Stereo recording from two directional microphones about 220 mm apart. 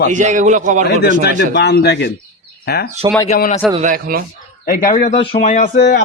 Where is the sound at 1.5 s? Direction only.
50° left (ahead or behind).